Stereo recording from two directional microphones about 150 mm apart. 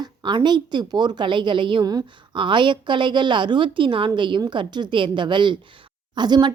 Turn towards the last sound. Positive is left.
turn(degrees=-30)  # may be behind; listen again after turning